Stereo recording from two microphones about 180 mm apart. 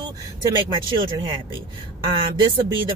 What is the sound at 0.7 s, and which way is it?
Speech, 30° right (ahead or behind).